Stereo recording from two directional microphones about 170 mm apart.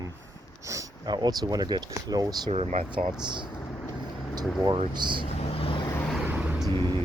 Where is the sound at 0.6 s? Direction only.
20° right (ahead or behind).